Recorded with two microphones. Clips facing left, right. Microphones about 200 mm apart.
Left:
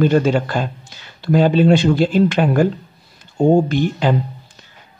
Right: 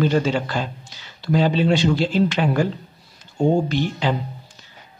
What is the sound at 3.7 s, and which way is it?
Speech, 50° left (ahead or behind).